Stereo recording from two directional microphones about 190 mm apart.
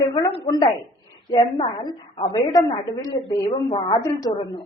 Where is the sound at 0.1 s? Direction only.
30° left (ahead or behind).